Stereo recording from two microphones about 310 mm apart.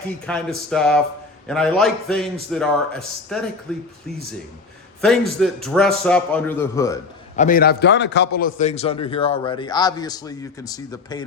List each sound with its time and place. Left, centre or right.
0.3 s a man's voice: centre
5.4 s a man's voice: centre
7.3 s a man's voice: left